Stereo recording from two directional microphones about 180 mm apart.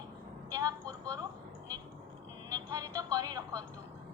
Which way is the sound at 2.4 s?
20° right (ahead or behind).